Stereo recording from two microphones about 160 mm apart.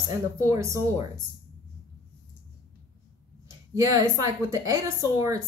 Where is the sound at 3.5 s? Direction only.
20° right (ahead or behind).